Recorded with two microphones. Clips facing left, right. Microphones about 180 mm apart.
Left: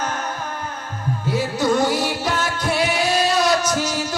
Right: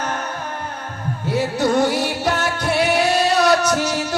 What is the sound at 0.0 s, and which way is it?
Music, 60° right (ahead or behind).